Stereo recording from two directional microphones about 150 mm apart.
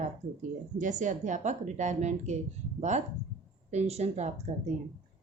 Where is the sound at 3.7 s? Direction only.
45° right (ahead or behind).